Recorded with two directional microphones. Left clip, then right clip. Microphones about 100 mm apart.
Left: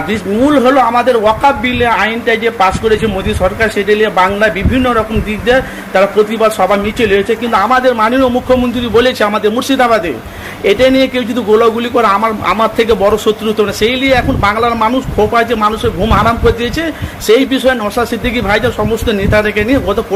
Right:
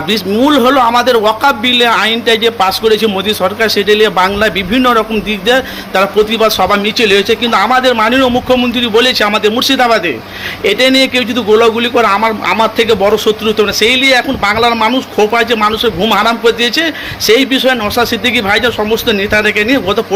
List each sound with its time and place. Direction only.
0.1 s a man's voice: 20° right (ahead or behind)